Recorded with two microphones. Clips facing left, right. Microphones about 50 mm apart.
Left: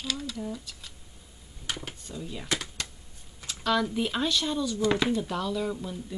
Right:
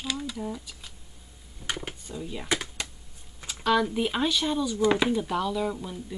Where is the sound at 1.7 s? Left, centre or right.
Centre.